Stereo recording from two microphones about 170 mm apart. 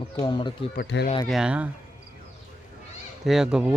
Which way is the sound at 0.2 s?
30° left (ahead or behind).